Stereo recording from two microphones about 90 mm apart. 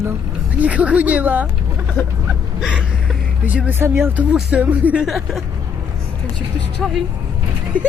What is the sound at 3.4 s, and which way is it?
Speech, 15° right (ahead or behind).